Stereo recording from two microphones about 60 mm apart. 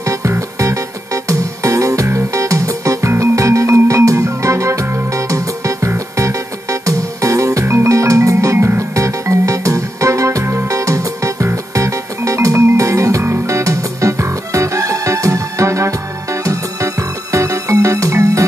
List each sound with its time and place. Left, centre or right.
0.2 s music: right
6.1 s music: right
8.9 s music: right